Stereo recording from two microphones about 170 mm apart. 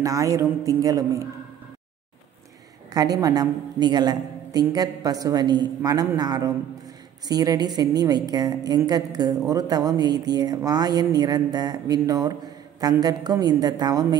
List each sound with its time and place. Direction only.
0.0 s a woman's voice: 20° right (ahead or behind)
2.9 s a woman's voice: 20° right (ahead or behind)